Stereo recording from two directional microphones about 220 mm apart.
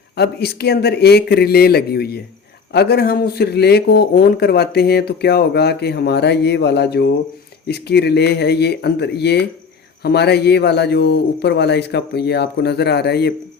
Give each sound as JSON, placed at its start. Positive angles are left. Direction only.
{"t": 0.2, "sound": "speech", "side_deg": 45}